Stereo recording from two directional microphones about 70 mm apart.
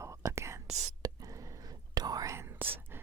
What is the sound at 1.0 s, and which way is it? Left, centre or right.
Whispering, right.